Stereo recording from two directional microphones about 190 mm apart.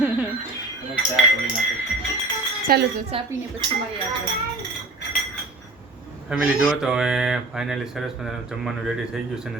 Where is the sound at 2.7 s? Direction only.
50° right (ahead or behind).